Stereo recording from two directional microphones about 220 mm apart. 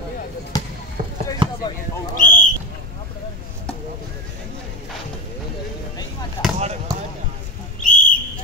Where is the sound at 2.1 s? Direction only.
35° left (ahead or behind).